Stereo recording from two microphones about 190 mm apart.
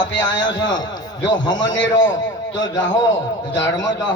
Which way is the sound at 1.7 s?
80° left.